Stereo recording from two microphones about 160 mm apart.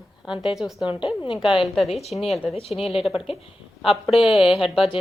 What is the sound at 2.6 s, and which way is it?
Speech, 35° left (ahead or behind).